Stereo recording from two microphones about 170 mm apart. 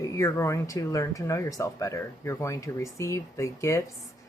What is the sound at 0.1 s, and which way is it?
Speech, 15° left (ahead or behind).